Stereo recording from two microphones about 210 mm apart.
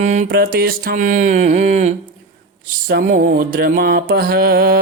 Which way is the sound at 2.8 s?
45° right (ahead or behind).